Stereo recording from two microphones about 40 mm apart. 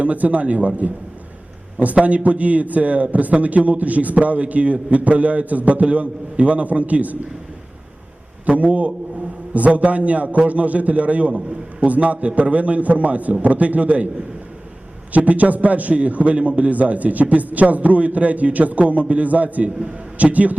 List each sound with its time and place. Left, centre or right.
0.0 s a man's voice: right
8.4 s a man's voice: right
15.1 s a man's voice: right